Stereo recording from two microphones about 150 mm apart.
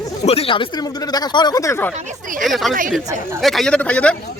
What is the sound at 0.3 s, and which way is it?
Speech, 40° left (ahead or behind).